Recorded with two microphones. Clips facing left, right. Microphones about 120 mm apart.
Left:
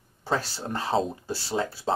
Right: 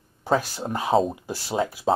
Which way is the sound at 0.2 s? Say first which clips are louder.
Right 5 dB; 15° right (ahead or behind).